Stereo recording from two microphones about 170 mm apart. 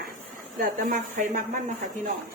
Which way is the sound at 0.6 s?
55° right (ahead or behind).